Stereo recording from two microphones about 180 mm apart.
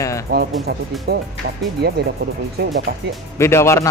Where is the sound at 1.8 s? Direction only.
65° right (ahead or behind).